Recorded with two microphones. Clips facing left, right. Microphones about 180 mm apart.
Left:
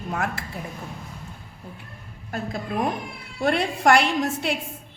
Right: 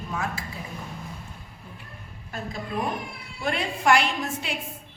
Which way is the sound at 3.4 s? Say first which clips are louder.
Left 5 dB; 70° left (ahead or behind).